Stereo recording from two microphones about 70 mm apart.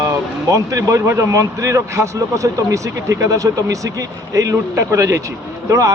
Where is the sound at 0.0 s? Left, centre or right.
Right.